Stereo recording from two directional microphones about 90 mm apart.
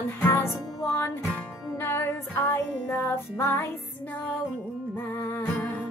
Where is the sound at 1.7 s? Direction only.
25° left (ahead or behind).